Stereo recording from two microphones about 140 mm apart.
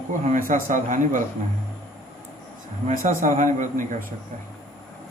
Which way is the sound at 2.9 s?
80° right.